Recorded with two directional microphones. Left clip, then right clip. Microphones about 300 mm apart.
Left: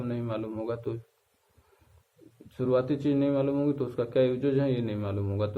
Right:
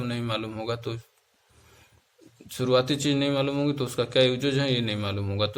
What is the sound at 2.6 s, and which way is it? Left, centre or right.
A man's voice, right.